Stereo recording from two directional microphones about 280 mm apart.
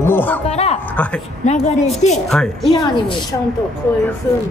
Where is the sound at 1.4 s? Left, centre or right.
Left.